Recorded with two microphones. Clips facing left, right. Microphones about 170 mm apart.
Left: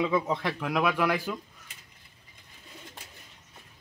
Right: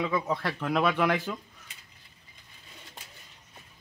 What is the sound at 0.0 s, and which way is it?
Speech, 20° left (ahead or behind).